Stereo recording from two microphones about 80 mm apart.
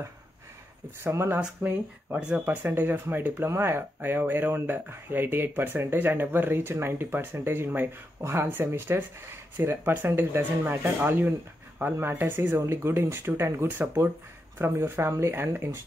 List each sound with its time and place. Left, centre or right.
1.0 s speech: right
1.4 s speech: centre; by 15.8 s right